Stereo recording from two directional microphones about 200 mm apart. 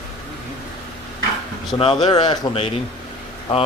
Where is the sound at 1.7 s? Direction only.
25° left (ahead or behind).